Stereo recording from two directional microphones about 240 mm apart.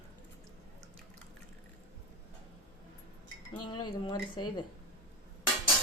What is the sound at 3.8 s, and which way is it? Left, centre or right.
Speech, centre.